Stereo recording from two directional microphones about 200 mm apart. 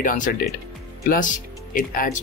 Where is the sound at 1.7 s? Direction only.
45° left (ahead or behind).